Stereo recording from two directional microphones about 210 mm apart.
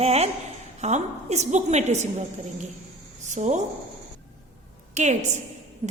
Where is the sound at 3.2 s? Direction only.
35° right (ahead or behind).